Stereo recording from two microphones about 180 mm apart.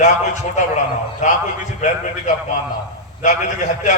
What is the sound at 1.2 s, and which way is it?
A man's voice, 40° left (ahead or behind).